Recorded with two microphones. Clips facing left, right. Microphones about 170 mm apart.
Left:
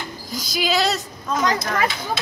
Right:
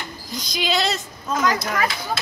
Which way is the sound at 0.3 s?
5° left (ahead or behind).